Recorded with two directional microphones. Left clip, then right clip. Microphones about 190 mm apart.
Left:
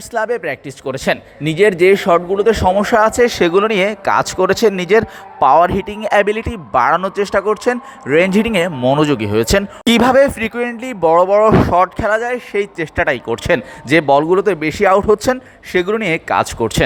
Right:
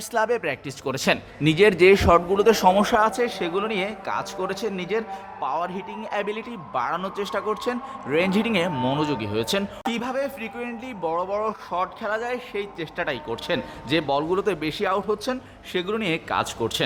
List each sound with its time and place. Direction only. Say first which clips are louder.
0.1 s speech: left 5 dB; 15° left (ahead or behind)
2.8 s speech: left 9 dB; 25° left (ahead or behind)
8.7 s speech: left 10 dB; 15° left (ahead or behind)
9.0 s speech: left 11 dB; 40° left (ahead or behind)
9.8 s speech: left 16 dB; 50° left (ahead or behind); by 16.8 s 30° left (ahead or behind)